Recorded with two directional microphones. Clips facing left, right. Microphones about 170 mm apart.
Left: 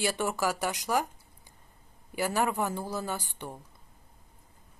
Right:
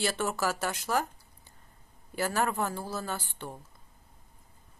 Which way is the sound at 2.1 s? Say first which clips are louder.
Left 1 dB; 15° left (ahead or behind).